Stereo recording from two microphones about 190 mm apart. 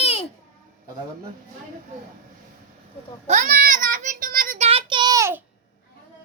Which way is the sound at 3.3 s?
40° right (ahead or behind).